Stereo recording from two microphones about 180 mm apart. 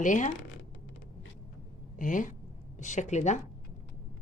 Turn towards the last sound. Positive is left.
turn(degrees=40)  # may be behind; listen again after turning